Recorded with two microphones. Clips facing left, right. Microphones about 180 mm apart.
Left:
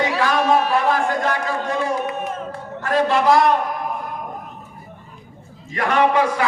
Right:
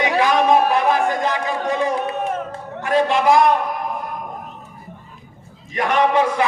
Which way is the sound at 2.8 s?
15° right (ahead or behind).